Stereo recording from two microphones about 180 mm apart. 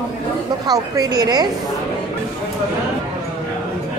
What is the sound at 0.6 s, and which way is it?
Speech, 20° right (ahead or behind).